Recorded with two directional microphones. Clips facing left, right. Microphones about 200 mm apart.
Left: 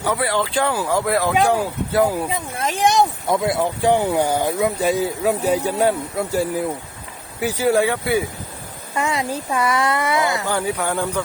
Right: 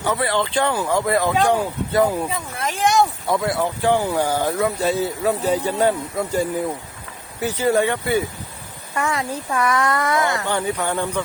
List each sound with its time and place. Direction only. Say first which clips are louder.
0.0 s speech: even; 10° left (ahead or behind)
2.6 s speech: left 1 dB; 20° left (ahead or behind)
9.0 s speech: left 1 dB; 15° left (ahead or behind)